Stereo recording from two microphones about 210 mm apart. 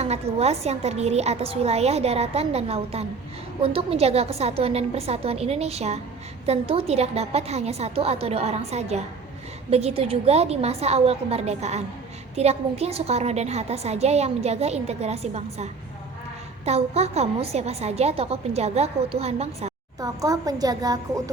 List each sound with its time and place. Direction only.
0.0 s a woman's voice: 30° right (ahead or behind)
20.0 s a woman's voice: 15° right (ahead or behind)